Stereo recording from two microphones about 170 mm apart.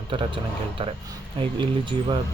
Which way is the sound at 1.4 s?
30° right (ahead or behind).